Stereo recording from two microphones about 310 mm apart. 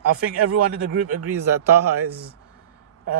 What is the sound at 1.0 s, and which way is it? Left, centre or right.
A man's voice, right.